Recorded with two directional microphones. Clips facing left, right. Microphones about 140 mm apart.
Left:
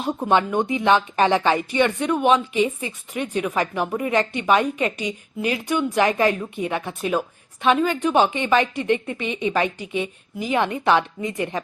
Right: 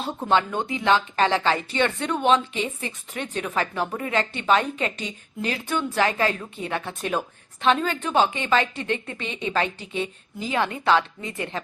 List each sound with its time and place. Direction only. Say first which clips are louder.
0.0 s speech: left 3 dB; 15° left (ahead or behind)